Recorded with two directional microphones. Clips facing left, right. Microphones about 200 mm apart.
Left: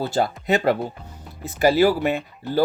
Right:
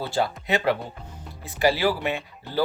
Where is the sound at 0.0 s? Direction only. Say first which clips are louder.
Left 3 dB; 45° left (ahead or behind).